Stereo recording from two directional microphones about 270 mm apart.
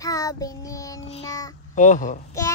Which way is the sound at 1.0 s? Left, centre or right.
Centre.